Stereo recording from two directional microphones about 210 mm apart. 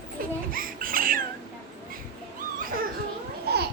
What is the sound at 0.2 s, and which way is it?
Baby cry, 40° right (ahead or behind).